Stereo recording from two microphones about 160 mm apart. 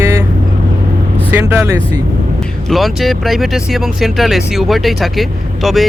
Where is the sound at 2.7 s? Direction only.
Centre (ahead or behind).